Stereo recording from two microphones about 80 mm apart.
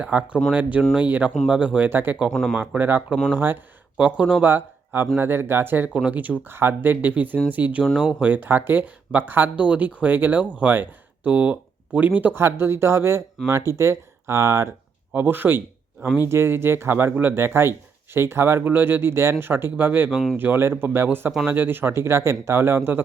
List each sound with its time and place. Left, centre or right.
0.0 s speech: centre
2.3 s speech: centre
2.6 s speech: right
15.1 s speech: right